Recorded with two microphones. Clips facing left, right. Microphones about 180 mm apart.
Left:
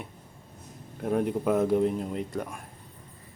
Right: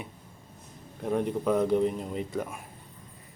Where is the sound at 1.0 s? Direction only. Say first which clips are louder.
Left 1 dB; 5° left (ahead or behind).